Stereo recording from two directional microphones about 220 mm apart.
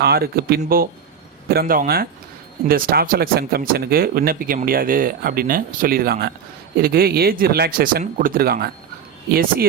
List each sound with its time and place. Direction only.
0.0 s speech: 45° right (ahead or behind)